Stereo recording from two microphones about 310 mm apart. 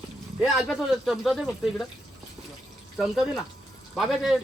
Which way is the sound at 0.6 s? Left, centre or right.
Centre.